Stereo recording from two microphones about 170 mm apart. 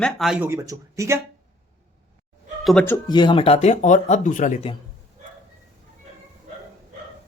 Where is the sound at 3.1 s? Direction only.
25° left (ahead or behind); by 4.6 s 50° left (ahead or behind).